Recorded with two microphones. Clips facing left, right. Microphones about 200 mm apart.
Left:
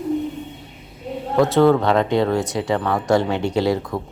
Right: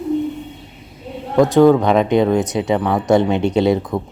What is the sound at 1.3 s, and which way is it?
Speech, 15° right (ahead or behind).